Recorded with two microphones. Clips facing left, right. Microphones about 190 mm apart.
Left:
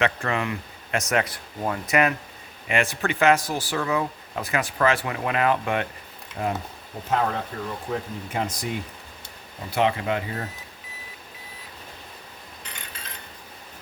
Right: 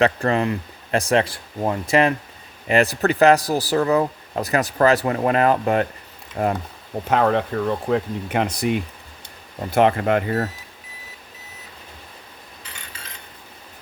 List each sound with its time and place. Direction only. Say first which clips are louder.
0.0 s speech: right 6 dB; 35° right (ahead or behind)
7.1 s speech: right 6 dB; 70° right (ahead or behind)
9.7 s speech: right 6 dB; 50° right (ahead or behind)